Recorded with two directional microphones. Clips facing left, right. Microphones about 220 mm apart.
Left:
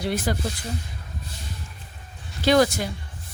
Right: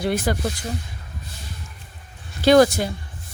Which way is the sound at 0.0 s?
50° right (ahead or behind).